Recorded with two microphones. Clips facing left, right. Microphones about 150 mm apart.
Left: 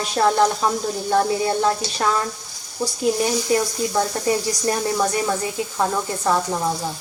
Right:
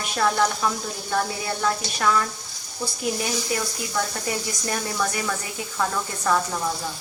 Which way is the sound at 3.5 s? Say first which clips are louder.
Left 7 dB; 30° left (ahead or behind).